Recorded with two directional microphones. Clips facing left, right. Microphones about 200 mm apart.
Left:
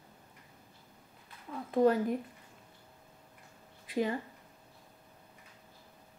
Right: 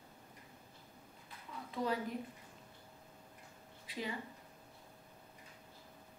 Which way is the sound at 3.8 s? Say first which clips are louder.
Left 11 dB; 50° left (ahead or behind).